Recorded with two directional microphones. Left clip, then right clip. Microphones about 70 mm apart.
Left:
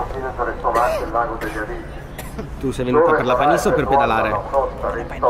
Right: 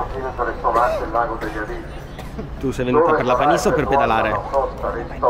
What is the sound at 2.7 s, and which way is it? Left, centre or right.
Speech, right.